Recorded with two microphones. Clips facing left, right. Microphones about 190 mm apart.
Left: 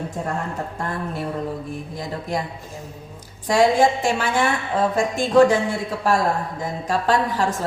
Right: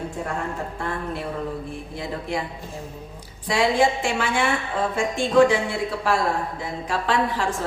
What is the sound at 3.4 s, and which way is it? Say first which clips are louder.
A woman's voice: left 4 dB; 45° left (ahead or behind).